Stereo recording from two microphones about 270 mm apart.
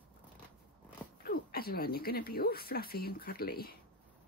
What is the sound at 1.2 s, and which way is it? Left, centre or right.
Speech, left.